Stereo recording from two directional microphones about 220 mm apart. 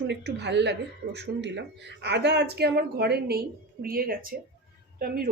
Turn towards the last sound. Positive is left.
turn(degrees=-40)  # may be behind; listen again after turning